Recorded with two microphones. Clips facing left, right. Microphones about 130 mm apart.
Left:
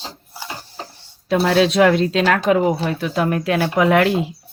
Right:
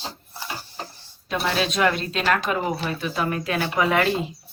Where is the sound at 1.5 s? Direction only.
85° left.